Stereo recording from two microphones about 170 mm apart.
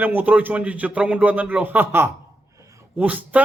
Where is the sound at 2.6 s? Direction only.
20° right (ahead or behind).